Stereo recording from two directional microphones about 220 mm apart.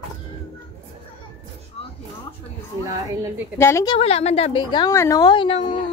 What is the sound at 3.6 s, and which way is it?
Speech, 10° left (ahead or behind).